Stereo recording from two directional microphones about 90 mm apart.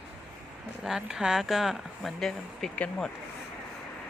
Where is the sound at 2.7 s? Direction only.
15° left (ahead or behind).